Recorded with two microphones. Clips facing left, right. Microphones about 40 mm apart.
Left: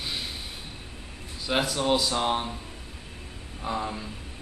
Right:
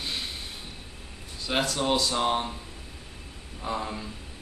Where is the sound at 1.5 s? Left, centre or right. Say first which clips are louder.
Left 1 dB; centre.